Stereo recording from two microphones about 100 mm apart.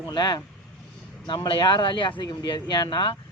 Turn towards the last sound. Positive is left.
turn(degrees=55)  # may be behind; listen again after turning